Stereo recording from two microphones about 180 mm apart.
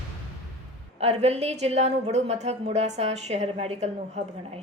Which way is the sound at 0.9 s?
35° right (ahead or behind).